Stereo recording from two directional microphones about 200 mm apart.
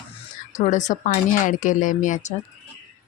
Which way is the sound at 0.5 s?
40° left (ahead or behind).